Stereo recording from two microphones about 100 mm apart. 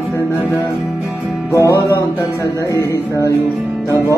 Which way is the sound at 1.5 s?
25° left (ahead or behind).